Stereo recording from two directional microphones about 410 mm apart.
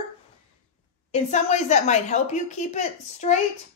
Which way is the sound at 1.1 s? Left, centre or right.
Centre.